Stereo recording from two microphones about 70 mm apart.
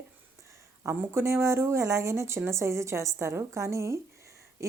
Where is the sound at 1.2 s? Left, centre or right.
Right.